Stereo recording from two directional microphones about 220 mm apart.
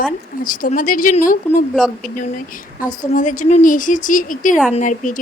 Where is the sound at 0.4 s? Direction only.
40° left (ahead or behind).